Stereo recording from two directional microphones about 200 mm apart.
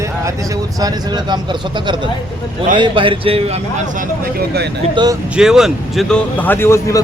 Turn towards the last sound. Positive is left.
turn(degrees=15)  # may be behind; listen again after turning